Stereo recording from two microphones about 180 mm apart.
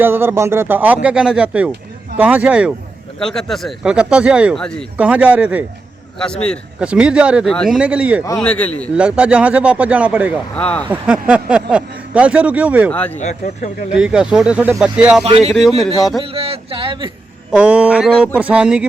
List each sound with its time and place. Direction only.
0.0 s speech: 10° right (ahead or behind)
6.1 s speech: 5° left (ahead or behind)
6.7 s speech: 5° right (ahead or behind)
8.4 s a man's voice: 5° left (ahead or behind)
9.0 s speech: 5° right (ahead or behind)
10.5 s a man's voice: 5° left (ahead or behind)
10.9 s speech: 5° right (ahead or behind)
12.9 s a man's voice: 10° left (ahead or behind)
13.1 s speech: 40° left (ahead or behind)
13.9 s speech: 5° right (ahead or behind)
15.2 s a sound: 35° right (ahead or behind)
16.0 s speech: centre (ahead or behind)
16.2 s a sound: 30° right (ahead or behind)
17.5 s speech: 5° right (ahead or behind)